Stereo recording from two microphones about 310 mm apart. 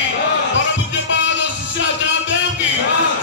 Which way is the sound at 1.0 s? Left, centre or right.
Left.